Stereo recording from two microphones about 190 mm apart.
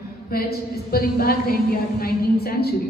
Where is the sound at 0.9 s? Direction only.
55° left (ahead or behind).